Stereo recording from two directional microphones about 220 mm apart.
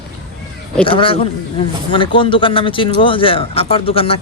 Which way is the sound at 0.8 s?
25° left (ahead or behind).